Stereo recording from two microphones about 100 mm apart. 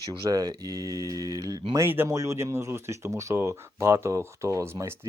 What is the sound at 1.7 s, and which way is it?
Speech, 25° right (ahead or behind).